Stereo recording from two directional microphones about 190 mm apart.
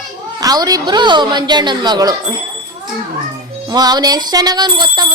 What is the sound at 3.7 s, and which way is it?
A woman's voice, 20° right (ahead or behind).